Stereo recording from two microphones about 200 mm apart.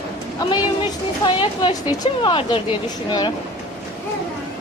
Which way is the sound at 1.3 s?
25° left (ahead or behind).